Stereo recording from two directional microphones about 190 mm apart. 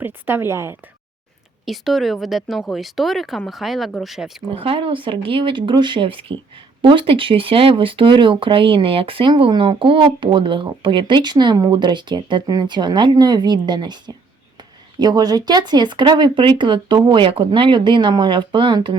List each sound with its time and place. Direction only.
0.0 s speech: 10° right (ahead or behind)
1.6 s speech: centre (ahead or behind)
4.4 s speech: 30° right (ahead or behind)